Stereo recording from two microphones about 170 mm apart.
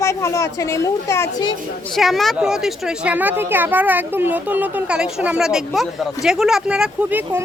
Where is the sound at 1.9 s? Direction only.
Centre (ahead or behind).